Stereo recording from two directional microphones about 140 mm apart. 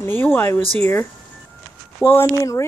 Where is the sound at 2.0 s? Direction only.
20° left (ahead or behind).